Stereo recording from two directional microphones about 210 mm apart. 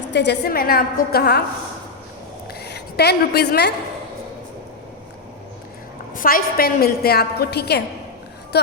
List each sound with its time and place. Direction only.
0.1 s a woman's voice: 55° left (ahead or behind)
2.5 s a sound: 50° left (ahead or behind)
6.1 s a woman's voice: 45° left (ahead or behind)